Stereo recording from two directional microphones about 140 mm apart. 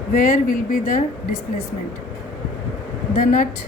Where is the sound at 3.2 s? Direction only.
85° left.